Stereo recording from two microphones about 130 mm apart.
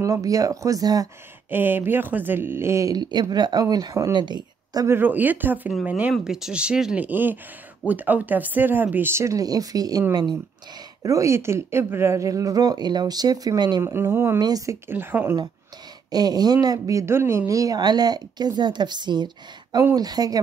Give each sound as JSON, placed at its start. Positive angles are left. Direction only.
{"t": 0.0, "sound": "speech", "side_deg": -25}
{"t": 1.5, "sound": "speech", "side_deg": -15}
{"t": 4.8, "sound": "speech", "side_deg": -15}
{"t": 13.8, "sound": "speech", "side_deg": -20}
{"t": 14.4, "sound": "speech", "side_deg": -30}
{"t": 14.9, "sound": "speech", "side_deg": -15}
{"t": 16.1, "sound": "speech", "side_deg": -30}